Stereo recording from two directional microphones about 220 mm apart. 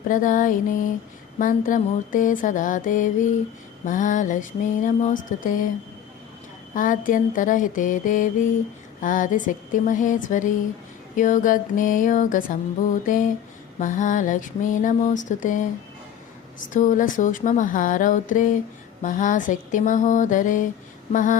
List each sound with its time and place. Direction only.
0.1 s mantra: 35° left (ahead or behind)
6.7 s mantra: 40° left (ahead or behind)
16.6 s mantra: 35° left (ahead or behind)